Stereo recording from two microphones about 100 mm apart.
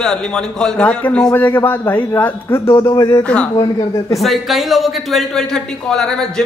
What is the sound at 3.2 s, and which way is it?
Speech, 10° left (ahead or behind).